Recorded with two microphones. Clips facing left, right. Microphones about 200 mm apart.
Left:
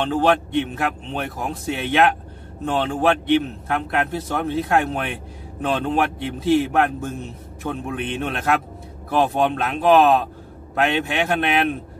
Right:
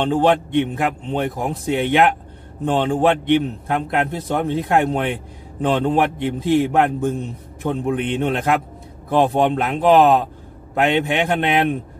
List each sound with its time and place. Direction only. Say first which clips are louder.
0.0 s a man's voice: right 2 dB; 15° right (ahead or behind)